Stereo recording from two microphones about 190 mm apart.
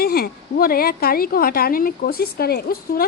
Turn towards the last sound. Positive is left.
turn(degrees=55)  # may be behind; listen again after turning